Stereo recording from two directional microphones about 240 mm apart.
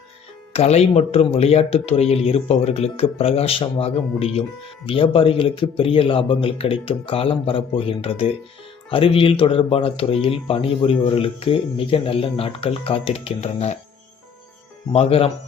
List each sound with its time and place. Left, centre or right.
0.5 s speech: left
14.9 s speech: left